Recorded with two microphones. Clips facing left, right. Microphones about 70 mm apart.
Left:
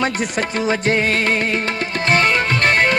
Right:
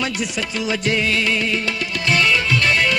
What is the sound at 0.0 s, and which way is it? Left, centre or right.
Music, left.